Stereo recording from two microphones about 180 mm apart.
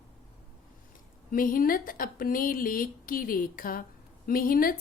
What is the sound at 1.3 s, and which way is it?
Speech, 50° left (ahead or behind).